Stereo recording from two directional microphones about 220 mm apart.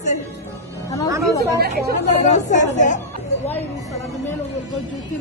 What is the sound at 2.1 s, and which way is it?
Speech, 35° left (ahead or behind).